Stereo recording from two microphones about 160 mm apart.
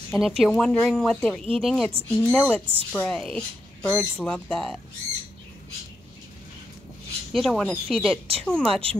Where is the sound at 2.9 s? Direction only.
5° left (ahead or behind).